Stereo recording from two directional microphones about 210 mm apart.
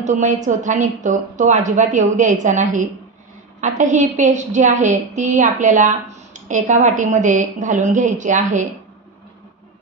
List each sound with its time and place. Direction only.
0.0 s a woman's voice: 35° right (ahead or behind)